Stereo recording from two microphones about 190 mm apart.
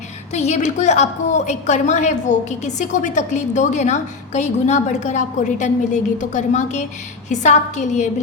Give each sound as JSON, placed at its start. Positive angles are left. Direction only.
{"t": 0.3, "sound": "a woman's voice", "side_deg": 35}